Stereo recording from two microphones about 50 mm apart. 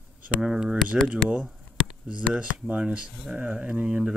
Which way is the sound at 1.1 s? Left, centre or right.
Right.